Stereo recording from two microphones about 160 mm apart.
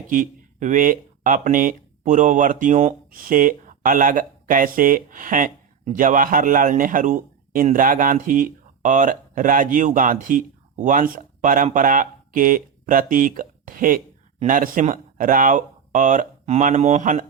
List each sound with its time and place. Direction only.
0.1 s speech: 55° right (ahead or behind)